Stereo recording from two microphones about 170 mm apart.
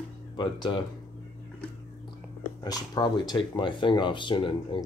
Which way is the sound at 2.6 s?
25° left (ahead or behind).